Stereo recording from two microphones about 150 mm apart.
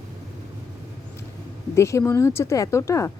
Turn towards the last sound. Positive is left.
turn(degrees=20)  # may be behind; listen again after turning